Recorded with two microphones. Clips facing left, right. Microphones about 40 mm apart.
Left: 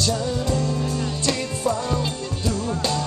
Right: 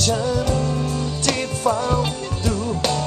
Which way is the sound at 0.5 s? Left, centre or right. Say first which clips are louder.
Right 2 dB; right.